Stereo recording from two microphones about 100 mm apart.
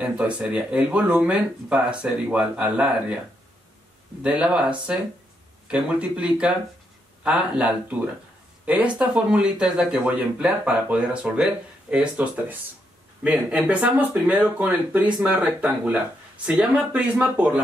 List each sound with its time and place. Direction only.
0.0 s speech: 10° right (ahead or behind)
4.2 s speech: 10° right (ahead or behind)